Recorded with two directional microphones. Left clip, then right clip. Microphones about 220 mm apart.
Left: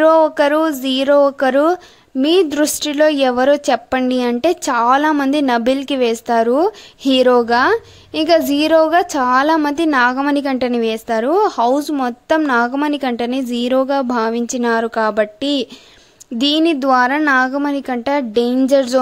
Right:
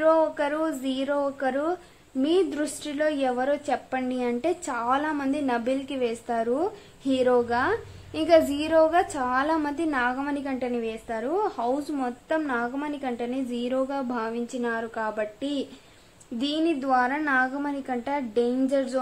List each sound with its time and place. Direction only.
0.0 s a woman's voice: 50° left (ahead or behind)